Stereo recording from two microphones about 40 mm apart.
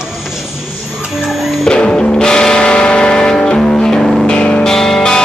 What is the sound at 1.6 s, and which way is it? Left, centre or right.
Music, centre.